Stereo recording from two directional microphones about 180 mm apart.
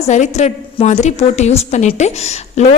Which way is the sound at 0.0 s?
40° left (ahead or behind).